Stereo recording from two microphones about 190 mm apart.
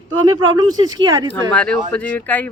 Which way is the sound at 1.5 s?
5° left (ahead or behind).